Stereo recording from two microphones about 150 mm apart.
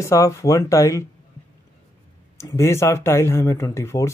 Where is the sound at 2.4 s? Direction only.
15° left (ahead or behind).